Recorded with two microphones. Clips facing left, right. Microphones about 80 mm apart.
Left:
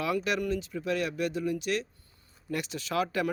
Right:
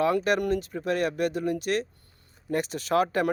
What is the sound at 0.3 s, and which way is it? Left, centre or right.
Speech, right.